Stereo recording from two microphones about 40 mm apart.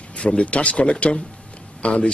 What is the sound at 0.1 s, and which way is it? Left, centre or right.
A man's voice, left.